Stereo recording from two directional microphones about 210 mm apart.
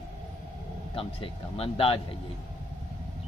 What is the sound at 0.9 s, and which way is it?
A man's voice, 25° left (ahead or behind).